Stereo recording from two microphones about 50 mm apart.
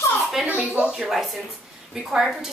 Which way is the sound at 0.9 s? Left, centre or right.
Centre.